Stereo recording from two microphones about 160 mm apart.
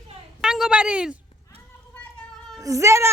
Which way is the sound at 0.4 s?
5° right (ahead or behind).